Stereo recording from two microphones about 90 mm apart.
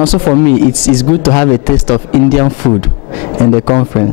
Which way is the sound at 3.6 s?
20° left (ahead or behind).